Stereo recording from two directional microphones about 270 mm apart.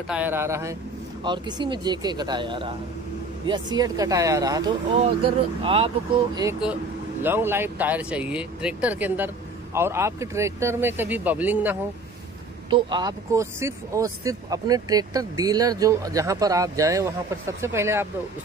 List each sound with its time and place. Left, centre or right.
0.1 s speech: centre
7.2 s speech: centre
12.6 s speech: centre